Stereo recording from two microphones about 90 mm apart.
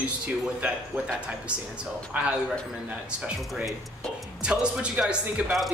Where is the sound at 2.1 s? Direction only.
15° right (ahead or behind).